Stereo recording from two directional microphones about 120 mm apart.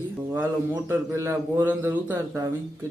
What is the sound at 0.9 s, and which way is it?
Speech, 20° right (ahead or behind).